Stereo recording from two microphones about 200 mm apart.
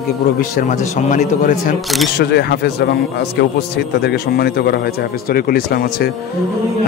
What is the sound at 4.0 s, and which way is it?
A man's voice, 55° left (ahead or behind).